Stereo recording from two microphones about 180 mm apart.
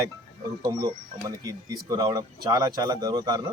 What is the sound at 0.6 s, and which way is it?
A man's voice, 20° right (ahead or behind).